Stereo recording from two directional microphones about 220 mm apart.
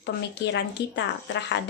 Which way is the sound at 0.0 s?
50° left (ahead or behind).